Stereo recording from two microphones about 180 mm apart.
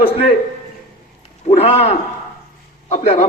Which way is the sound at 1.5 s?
35° left (ahead or behind).